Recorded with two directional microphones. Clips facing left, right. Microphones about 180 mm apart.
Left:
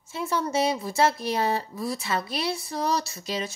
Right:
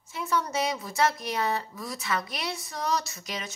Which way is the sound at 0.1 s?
30° left (ahead or behind).